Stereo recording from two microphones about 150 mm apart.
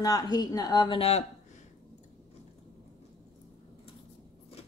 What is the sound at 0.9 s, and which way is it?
Speech, 40° left (ahead or behind).